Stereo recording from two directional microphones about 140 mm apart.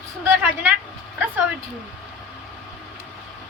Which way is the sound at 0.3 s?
15° right (ahead or behind).